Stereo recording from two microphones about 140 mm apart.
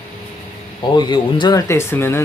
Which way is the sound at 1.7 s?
20° left (ahead or behind).